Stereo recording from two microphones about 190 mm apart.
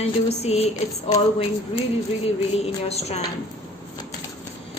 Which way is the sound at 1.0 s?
25° left (ahead or behind).